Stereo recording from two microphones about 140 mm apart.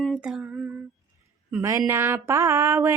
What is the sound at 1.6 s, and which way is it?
Speech, 20° right (ahead or behind).